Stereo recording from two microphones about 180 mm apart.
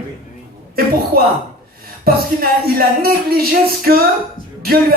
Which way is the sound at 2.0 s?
55° right (ahead or behind).